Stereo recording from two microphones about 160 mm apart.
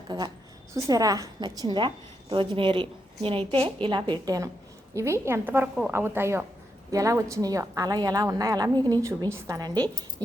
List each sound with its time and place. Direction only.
0.7 s a woman's voice: 20° right (ahead or behind)